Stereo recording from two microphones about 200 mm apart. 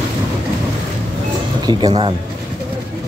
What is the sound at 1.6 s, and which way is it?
Speech, 20° right (ahead or behind).